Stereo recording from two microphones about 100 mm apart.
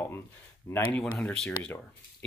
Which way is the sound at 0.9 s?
10° left (ahead or behind).